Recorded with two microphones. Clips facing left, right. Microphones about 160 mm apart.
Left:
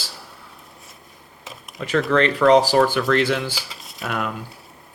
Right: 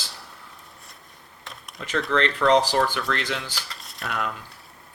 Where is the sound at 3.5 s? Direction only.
5° left (ahead or behind).